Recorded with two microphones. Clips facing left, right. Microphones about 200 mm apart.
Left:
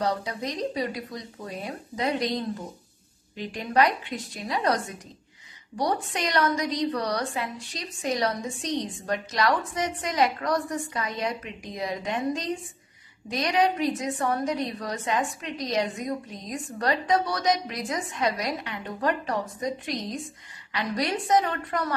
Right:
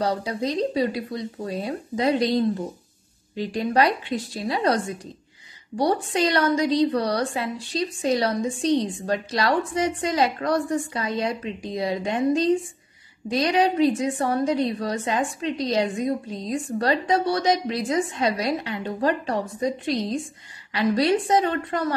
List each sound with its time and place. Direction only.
0.0 s a woman's voice: 30° right (ahead or behind)